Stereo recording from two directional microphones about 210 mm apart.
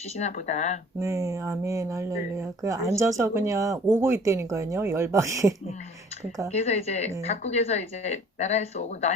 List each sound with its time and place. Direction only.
0.2 s speech: 35° left (ahead or behind)
0.9 s speech: 15° right (ahead or behind)
6.5 s speech: 30° left (ahead or behind)